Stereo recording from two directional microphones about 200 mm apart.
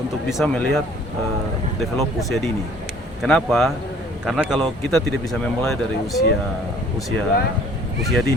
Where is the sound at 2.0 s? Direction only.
Centre (ahead or behind).